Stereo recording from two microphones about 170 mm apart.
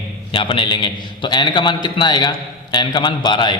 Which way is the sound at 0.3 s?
30° left (ahead or behind).